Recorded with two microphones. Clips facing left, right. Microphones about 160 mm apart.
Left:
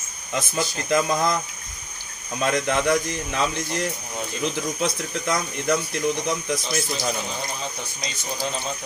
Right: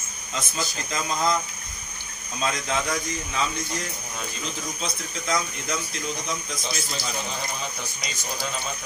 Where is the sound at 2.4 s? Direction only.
65° left (ahead or behind).